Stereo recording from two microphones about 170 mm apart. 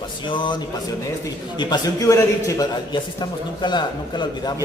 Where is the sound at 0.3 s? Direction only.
30° left (ahead or behind).